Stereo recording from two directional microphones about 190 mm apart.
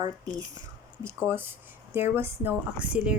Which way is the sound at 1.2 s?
10° right (ahead or behind).